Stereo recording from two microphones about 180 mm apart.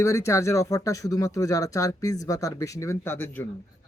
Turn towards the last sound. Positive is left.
turn(degrees=10)  # may be behind; listen again after turning